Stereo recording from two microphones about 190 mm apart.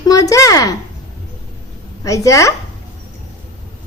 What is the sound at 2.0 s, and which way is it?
Speech, 15° left (ahead or behind).